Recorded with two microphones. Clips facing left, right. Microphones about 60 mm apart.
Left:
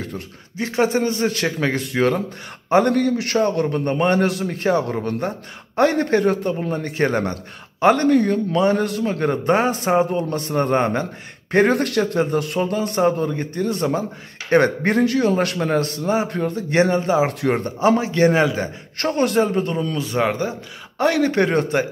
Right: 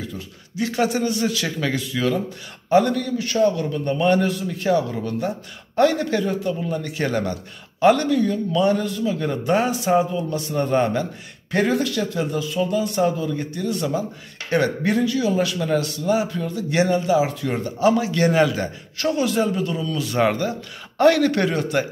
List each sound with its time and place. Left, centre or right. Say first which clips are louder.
0.6 s a man's voice: left 2 dB; left
3.3 s a man's voice: right 2 dB; left
4.2 s a man's voice: left 3 dB; left
4.5 s a man's voice: left 1 dB; left
8.1 s speech: left 3 dB; left
8.8 s speech: left 2 dB; left
9.3 s a man's voice: left 3 dB; left
11.6 s a man's voice: left 2 dB; left
15.0 s a man's voice: left 2 dB; left
17.3 s speech: left 4 dB; left
17.7 s a man's voice: even; left
18.9 s a man's voice: left 2 dB; left
21.0 s a man's voice: right 3 dB; centre
21.3 s a man's voice: left 3 dB; left